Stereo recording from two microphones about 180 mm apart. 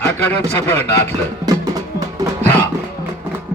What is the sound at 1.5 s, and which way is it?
Music, 20° right (ahead or behind).